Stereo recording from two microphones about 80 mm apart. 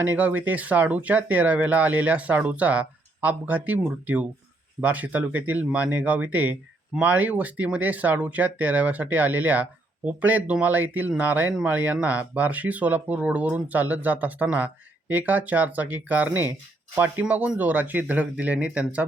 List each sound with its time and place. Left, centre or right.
0.0 s speech: right